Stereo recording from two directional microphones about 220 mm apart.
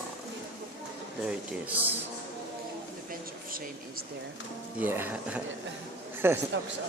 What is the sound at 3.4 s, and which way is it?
Speech, 40° right (ahead or behind).